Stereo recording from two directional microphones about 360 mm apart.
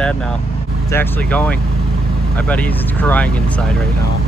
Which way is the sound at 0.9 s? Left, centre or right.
Centre.